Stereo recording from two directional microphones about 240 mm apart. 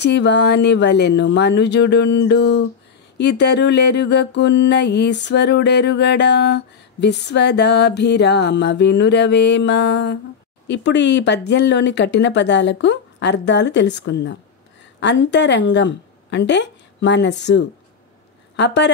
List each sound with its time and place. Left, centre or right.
0.0 s mantra: left
15.0 s a woman's voice: left
18.6 s mantra: left